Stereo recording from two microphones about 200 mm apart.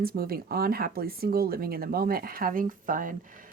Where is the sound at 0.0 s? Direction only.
50° right (ahead or behind).